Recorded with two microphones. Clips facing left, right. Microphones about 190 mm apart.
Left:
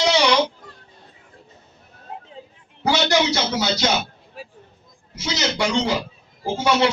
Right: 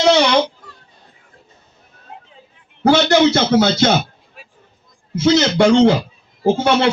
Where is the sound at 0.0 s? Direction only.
55° right (ahead or behind).